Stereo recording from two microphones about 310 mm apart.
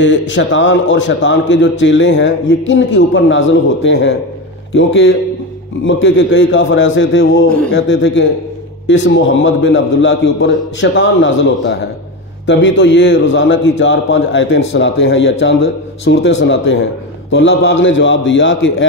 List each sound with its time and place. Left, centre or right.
0.3 s a man's voice: left